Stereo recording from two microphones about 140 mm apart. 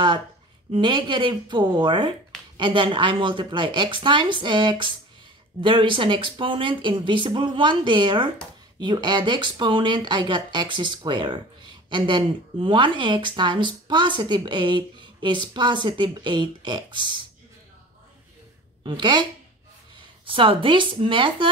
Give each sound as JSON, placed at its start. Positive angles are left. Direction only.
{"t": 0.7, "sound": "speech", "side_deg": -35}
{"t": 18.9, "sound": "speech", "side_deg": -35}
{"t": 20.2, "sound": "speech", "side_deg": -40}